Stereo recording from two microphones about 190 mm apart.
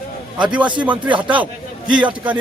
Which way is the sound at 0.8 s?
10° right (ahead or behind).